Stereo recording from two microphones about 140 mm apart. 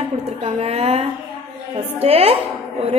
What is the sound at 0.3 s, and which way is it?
A woman's voice, 45° right (ahead or behind).